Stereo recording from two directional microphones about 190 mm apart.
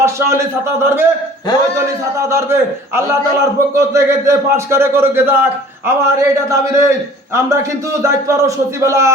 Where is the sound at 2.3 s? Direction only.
15° right (ahead or behind).